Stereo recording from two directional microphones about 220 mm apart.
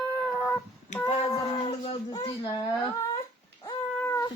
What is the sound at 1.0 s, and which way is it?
Speech, 20° left (ahead or behind).